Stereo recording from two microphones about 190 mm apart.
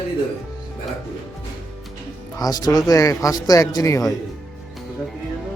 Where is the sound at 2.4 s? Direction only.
20° left (ahead or behind).